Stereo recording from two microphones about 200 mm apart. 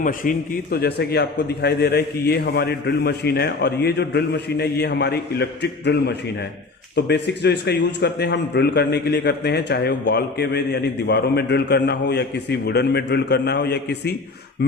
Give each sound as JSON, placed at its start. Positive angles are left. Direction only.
{"t": 0.0, "sound": "a man's voice", "side_deg": 45}